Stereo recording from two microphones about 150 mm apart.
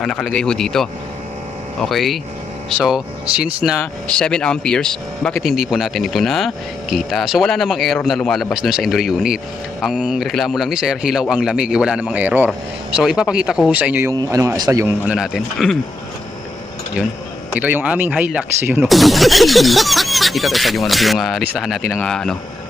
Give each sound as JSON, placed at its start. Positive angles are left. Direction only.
{"t": 0.0, "sound": "speech", "side_deg": 5}
{"t": 3.8, "sound": "speech", "side_deg": 5}
{"t": 14.1, "sound": "speech", "side_deg": -20}
{"t": 15.0, "sound": "speech", "side_deg": -5}
{"t": 17.5, "sound": "speech", "side_deg": -10}